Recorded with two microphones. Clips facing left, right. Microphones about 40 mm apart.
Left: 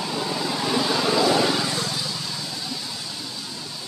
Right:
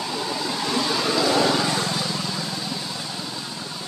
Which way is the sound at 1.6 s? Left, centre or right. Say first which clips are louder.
Right 3 dB; right.